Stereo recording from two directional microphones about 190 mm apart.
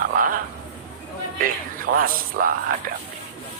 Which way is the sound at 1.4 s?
45° right (ahead or behind).